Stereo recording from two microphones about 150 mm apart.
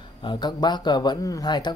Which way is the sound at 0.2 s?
30° left (ahead or behind).